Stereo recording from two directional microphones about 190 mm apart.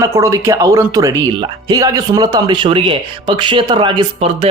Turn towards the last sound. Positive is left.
turn(degrees=-25)  # may be behind; listen again after turning